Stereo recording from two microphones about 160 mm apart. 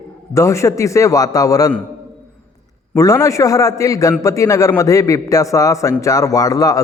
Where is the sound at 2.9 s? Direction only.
20° left (ahead or behind).